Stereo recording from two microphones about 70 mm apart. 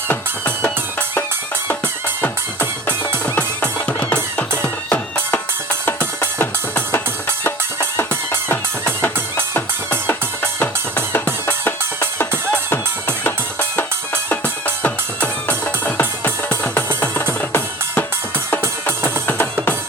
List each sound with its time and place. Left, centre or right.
0.1 s music: left
4.6 s music: left
9.6 s music: left
11.6 s music: left
18.9 s music: left